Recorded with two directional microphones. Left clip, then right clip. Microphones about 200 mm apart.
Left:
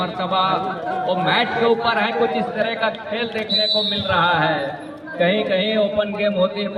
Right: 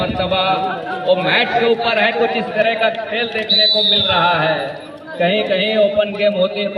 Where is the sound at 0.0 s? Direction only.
10° left (ahead or behind).